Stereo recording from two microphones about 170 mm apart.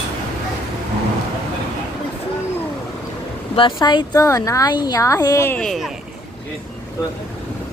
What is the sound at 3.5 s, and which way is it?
Speech, 25° left (ahead or behind).